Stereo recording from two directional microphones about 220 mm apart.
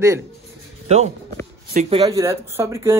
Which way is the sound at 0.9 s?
30° right (ahead or behind).